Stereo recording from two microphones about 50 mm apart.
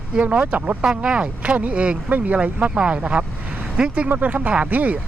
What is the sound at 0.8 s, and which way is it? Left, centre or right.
Speech, centre.